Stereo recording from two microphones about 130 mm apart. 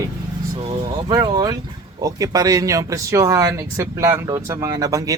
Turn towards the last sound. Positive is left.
turn(degrees=-25)  # may be behind; listen again after turning